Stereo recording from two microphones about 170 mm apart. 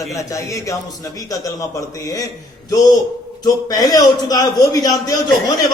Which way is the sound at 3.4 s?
20° left (ahead or behind).